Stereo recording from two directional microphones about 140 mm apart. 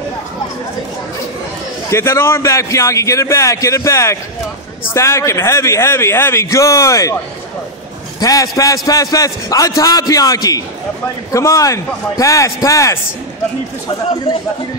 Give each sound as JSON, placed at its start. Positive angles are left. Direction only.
{"t": 1.9, "sound": "a man's voice", "side_deg": 20}
{"t": 8.2, "sound": "a man's voice", "side_deg": 25}